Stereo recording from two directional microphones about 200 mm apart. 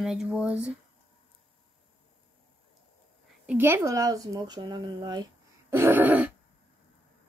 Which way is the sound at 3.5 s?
10° right (ahead or behind).